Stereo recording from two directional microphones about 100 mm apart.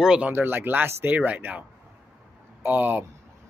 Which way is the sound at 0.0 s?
5° right (ahead or behind).